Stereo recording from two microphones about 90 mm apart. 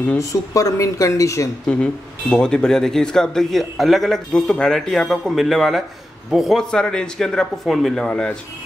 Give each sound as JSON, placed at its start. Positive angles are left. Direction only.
{"t": 0.2, "sound": "a woman's voice", "side_deg": 35}
{"t": 1.7, "sound": "a man's voice", "side_deg": 10}